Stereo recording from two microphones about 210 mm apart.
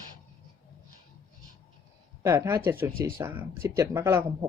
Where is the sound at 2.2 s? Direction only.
15° right (ahead or behind).